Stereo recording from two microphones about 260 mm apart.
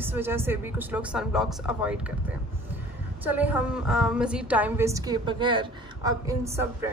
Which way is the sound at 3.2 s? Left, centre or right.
Centre.